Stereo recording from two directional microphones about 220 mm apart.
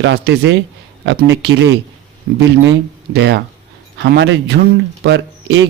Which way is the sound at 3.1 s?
50° right (ahead or behind).